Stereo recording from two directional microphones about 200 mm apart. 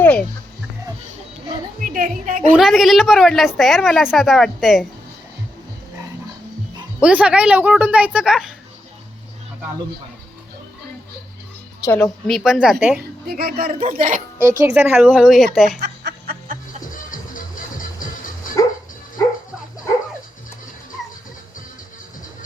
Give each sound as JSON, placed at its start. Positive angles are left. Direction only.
{"t": 0.0, "sound": "music", "side_deg": 5}
{"t": 1.8, "sound": "a woman's voice", "side_deg": -40}
{"t": 2.6, "sound": "a woman's voice", "side_deg": 0}
{"t": 7.0, "sound": "a woman's voice", "side_deg": -5}
{"t": 11.9, "sound": "a woman's voice", "side_deg": 10}
{"t": 13.2, "sound": "speech", "side_deg": -50}
{"t": 14.6, "sound": "a woman's voice", "side_deg": -10}
{"t": 15.8, "sound": "music", "side_deg": -50}
{"t": 16.9, "sound": "music", "side_deg": 40}